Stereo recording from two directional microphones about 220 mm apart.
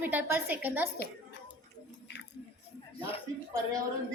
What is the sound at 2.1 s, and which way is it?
Squish, 50° left (ahead or behind).